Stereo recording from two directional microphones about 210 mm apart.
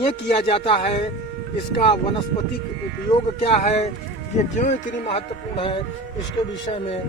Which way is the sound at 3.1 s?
30° left (ahead or behind).